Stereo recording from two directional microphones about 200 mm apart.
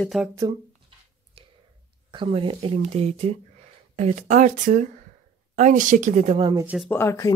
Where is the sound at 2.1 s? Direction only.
25° right (ahead or behind).